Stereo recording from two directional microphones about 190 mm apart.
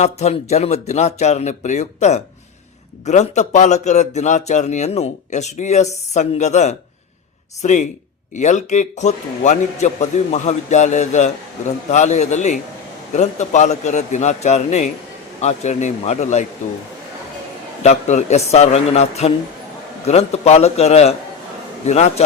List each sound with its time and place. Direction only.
0.0 s a man's voice: 35° left (ahead or behind)
17.8 s a man's voice: 35° left (ahead or behind)